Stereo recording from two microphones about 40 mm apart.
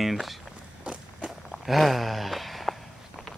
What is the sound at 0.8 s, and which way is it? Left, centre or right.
Walk, right.